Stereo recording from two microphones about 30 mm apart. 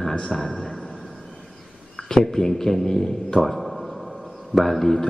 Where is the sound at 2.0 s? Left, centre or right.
Centre.